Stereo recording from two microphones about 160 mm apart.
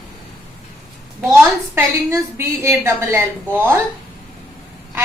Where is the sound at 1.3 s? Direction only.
20° right (ahead or behind).